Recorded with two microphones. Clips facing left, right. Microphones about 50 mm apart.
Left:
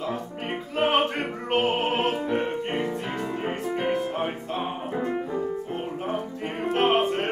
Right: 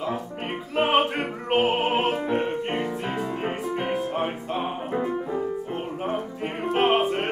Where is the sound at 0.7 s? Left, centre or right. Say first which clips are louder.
Right 1 dB; centre.